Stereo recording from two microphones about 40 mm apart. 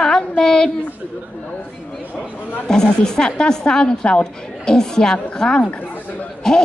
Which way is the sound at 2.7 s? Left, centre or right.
Centre.